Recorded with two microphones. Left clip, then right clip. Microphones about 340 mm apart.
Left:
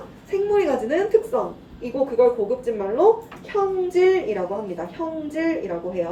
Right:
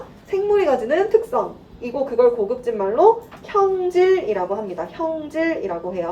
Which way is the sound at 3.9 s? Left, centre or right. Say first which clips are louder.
Right 2 dB; centre.